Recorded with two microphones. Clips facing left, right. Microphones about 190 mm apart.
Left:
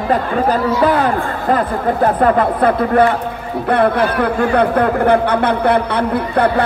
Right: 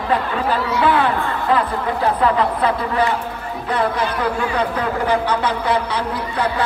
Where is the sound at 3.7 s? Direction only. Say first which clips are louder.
Left 6 dB; 60° left (ahead or behind).